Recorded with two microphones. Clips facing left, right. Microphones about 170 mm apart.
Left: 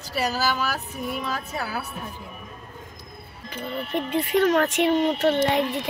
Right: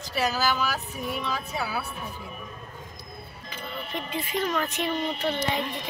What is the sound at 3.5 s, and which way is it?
Speech, 60° left (ahead or behind).